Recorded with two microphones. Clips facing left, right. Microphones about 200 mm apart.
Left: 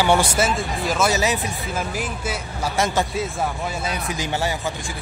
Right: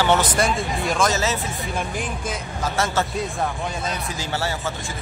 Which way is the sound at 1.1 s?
15° left (ahead or behind).